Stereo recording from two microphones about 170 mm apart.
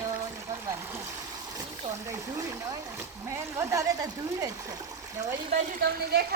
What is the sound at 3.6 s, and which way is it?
Speech, 20° right (ahead or behind).